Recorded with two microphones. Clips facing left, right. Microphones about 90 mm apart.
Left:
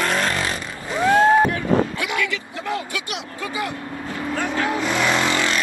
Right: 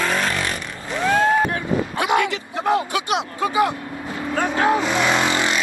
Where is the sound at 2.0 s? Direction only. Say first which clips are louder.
Right 5 dB; 25° right (ahead or behind).